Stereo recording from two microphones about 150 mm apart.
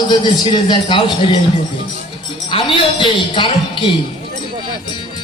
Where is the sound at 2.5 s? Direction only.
35° left (ahead or behind).